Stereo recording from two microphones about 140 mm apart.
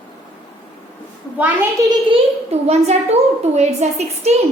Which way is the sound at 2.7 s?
50° right (ahead or behind).